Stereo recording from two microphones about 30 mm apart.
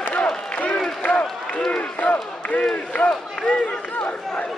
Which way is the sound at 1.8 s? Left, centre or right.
Left.